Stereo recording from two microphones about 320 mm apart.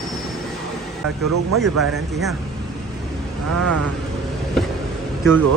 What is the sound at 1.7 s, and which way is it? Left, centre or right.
Speech, centre.